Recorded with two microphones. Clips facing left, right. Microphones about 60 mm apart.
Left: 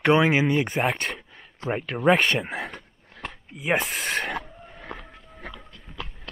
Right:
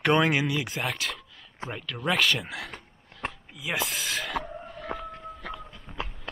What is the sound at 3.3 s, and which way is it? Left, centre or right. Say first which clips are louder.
Ratchet: left 11 dB; left.